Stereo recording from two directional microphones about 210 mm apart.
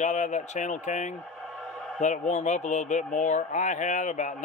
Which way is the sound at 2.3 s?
35° left (ahead or behind).